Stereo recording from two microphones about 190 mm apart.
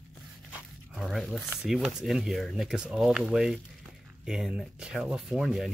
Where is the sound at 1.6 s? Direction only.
5° right (ahead or behind).